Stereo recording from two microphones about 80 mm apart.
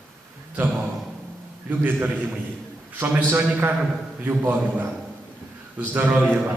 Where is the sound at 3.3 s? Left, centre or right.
Right.